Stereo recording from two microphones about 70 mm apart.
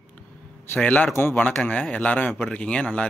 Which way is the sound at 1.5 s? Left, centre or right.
Centre.